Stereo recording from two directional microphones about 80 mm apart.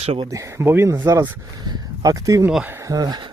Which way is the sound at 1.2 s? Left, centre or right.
Right.